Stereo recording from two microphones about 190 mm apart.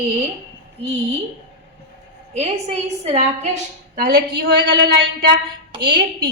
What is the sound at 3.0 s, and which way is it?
A woman's voice, 35° right (ahead or behind).